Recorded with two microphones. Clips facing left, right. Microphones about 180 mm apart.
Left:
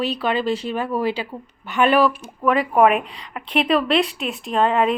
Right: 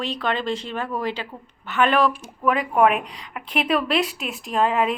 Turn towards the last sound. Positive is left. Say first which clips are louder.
# left 3 dB
turn(degrees=0)  # may be behind; listen again after turning